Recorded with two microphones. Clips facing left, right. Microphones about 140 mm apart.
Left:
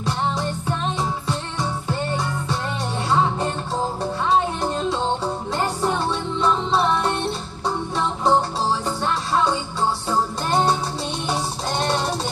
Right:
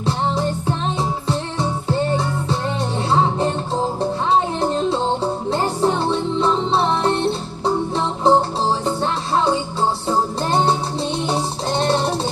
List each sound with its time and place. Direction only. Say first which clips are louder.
0.0 s music: right 3 dB; 30° right (ahead or behind)
4.6 s music: right 4 dB; 30° right (ahead or behind)